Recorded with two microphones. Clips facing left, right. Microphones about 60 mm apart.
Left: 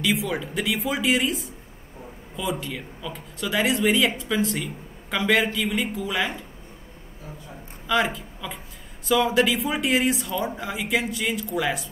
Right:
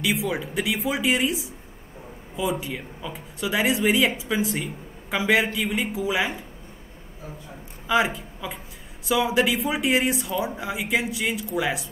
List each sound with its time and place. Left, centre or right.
0.0 s speech: centre
3.3 s speech: centre
7.8 s speech: centre